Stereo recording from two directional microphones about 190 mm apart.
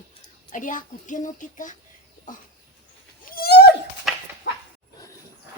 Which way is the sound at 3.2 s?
50° left (ahead or behind).